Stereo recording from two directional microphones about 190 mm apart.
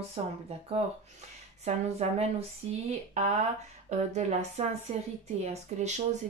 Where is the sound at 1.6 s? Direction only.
35° right (ahead or behind).